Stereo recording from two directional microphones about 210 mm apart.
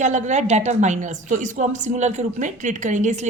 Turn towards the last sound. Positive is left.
turn(degrees=-35)  # may be behind; listen again after turning